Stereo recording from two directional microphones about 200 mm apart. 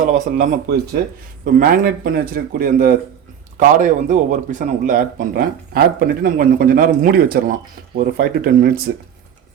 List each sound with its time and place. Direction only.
0.1 s speech: 45° right (ahead or behind)